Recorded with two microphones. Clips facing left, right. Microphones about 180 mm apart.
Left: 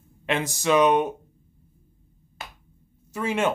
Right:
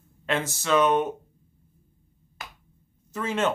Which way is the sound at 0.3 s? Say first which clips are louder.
Left 2 dB; 15° left (ahead or behind).